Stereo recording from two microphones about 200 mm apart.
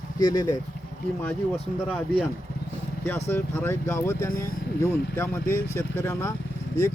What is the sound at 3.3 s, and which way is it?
A man's voice, 10° left (ahead or behind).